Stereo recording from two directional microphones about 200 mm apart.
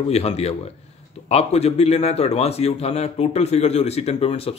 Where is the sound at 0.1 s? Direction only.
30° left (ahead or behind).